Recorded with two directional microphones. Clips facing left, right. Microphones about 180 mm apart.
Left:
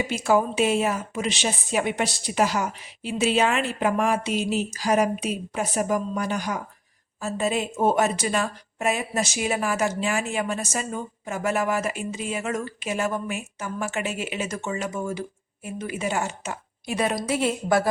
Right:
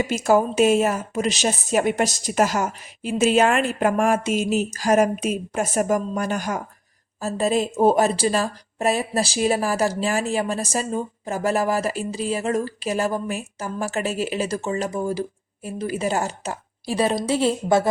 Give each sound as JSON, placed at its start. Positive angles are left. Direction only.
{"t": 0.0, "sound": "a woman's voice", "side_deg": -45}